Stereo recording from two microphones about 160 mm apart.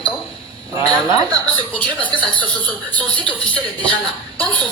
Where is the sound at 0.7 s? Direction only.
25° right (ahead or behind).